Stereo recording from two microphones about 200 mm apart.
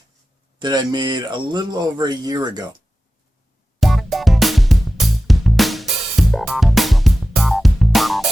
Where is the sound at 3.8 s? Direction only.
Centre (ahead or behind).